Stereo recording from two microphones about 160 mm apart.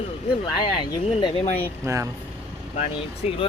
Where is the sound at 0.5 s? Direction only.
30° left (ahead or behind).